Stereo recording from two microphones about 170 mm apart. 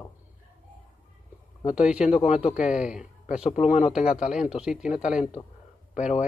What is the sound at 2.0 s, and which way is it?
Speech, 40° left (ahead or behind).